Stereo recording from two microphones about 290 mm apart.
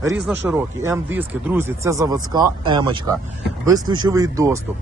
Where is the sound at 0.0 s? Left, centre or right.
Right.